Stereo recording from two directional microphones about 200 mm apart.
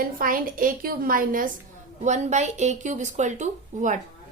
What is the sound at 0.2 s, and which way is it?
A woman's voice, 45° right (ahead or behind).